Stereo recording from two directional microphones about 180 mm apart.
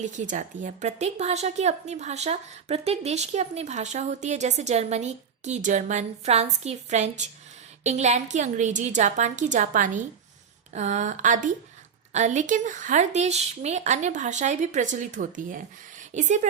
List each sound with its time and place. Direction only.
0.0 s a woman's voice: 45° right (ahead or behind)